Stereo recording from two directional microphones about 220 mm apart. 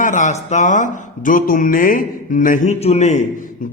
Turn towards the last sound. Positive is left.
turn(degrees=35)  # may be behind; listen again after turning